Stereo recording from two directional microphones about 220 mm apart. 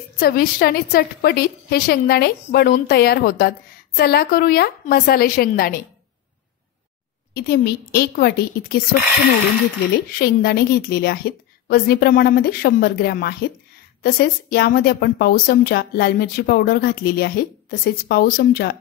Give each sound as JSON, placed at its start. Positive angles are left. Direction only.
{"t": 0.2, "sound": "a woman's voice", "side_deg": 45}
{"t": 7.3, "sound": "a woman's voice", "side_deg": 45}
{"t": 10.1, "sound": "a woman's voice", "side_deg": 45}